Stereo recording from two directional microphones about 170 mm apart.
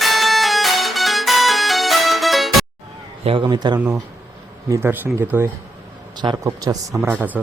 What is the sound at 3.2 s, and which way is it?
A man's voice, 30° right (ahead or behind).